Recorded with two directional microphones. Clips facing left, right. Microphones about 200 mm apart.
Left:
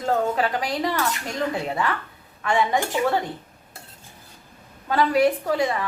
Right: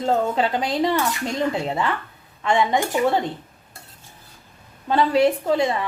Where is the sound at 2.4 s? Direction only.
20° right (ahead or behind).